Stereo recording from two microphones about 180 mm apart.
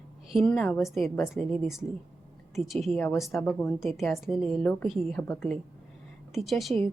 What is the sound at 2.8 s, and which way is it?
A woman's voice, 5° left (ahead or behind).